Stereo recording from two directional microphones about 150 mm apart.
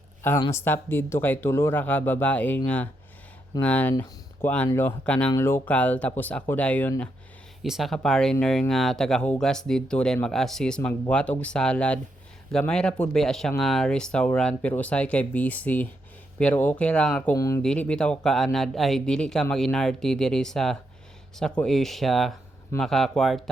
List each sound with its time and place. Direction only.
0.5 s speech: 15° left (ahead or behind)
7.6 s speech: centre (ahead or behind)
17.3 s speech: 20° left (ahead or behind)
17.6 s speech: 5° left (ahead or behind)